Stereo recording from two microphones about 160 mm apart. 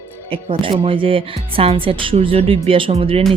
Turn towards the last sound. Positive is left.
turn(degrees=-35)  # may be behind; listen again after turning